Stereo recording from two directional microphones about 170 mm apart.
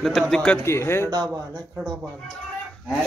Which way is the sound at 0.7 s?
15° left (ahead or behind).